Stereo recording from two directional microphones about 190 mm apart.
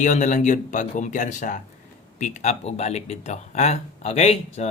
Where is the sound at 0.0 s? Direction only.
40° left (ahead or behind).